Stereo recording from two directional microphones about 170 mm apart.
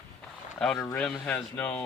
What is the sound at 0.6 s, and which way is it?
Speech, 5° left (ahead or behind).